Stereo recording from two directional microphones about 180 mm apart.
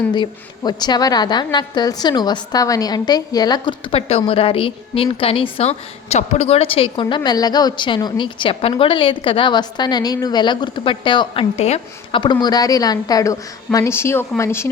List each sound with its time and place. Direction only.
0.1 s a woman's voice: 25° left (ahead or behind)
12.2 s a woman's voice: 25° left (ahead or behind)